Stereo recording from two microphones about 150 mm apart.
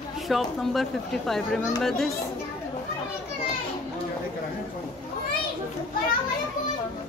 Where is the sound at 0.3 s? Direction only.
Centre (ahead or behind).